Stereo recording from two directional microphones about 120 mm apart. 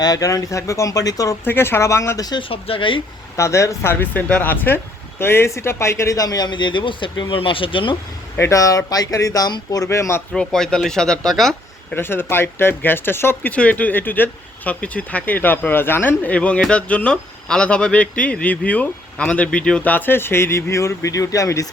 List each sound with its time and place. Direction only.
0.0 s speech: 30° left (ahead or behind)
1.5 s speech: 20° left (ahead or behind)
2.5 s speech: 50° left (ahead or behind)
3.3 s speech: 25° left (ahead or behind); by 7.9 s 45° left (ahead or behind)
8.4 s speech: 25° left (ahead or behind)
10.3 s speech: 5° left (ahead or behind)
11.9 s speech: 20° left (ahead or behind)